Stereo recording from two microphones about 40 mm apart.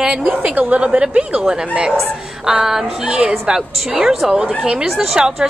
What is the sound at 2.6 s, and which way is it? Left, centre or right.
Speech, centre.